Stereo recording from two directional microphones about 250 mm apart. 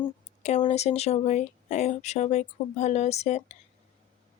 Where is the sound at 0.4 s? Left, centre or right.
Left.